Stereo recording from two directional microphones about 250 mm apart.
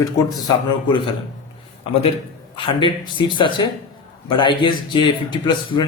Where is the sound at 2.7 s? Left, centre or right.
Centre.